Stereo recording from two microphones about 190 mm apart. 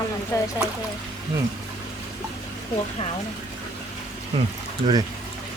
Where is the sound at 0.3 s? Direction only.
15° left (ahead or behind).